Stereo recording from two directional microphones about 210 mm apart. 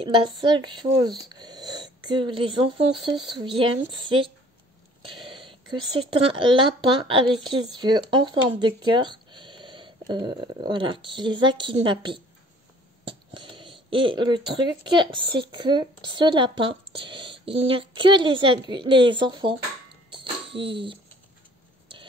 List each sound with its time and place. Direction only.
0.0 s speech: 25° right (ahead or behind)
13.3 s speech: 25° right (ahead or behind)
20.1 s music: 25° right (ahead or behind)